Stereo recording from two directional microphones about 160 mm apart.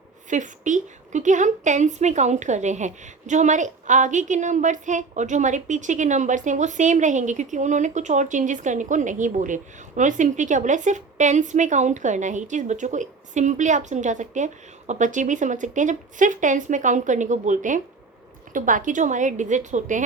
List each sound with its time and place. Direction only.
0.3 s a woman's voice: 50° right (ahead or behind)